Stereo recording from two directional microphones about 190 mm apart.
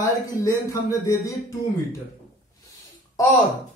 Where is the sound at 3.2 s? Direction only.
15° left (ahead or behind).